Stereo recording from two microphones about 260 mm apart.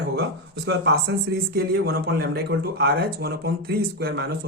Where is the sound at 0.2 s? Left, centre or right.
Right.